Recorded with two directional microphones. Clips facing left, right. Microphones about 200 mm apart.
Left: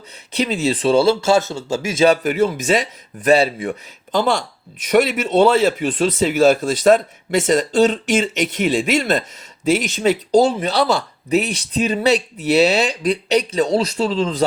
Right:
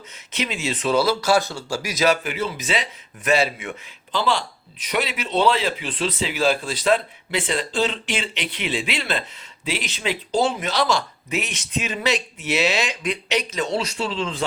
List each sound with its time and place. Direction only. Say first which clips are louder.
0.3 s speech: left 8 dB; 35° left (ahead or behind)
2.2 s speech: left 9 dB; 45° left (ahead or behind)
3.2 s speech: left 6 dB; 35° left (ahead or behind)